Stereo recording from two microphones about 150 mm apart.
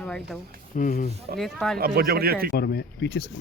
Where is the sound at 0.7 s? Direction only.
65° left (ahead or behind).